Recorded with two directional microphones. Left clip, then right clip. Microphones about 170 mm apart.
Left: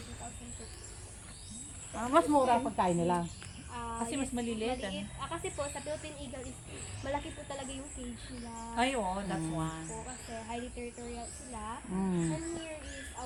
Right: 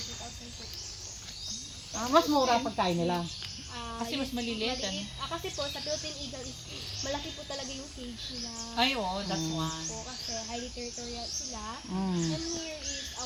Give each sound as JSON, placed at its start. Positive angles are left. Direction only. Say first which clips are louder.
{"t": 2.0, "sound": "a woman's voice", "louder": "right 2 dB", "side_deg": -60}
{"t": 7.0, "sound": "speech", "louder": "even", "side_deg": -50}
{"t": 8.7, "sound": "speech", "louder": "right 3 dB", "side_deg": -50}
{"t": 11.6, "sound": "speech", "louder": "right 2 dB", "side_deg": -50}